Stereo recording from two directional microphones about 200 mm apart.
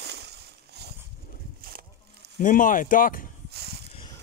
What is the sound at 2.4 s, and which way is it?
Speech, 40° left (ahead or behind).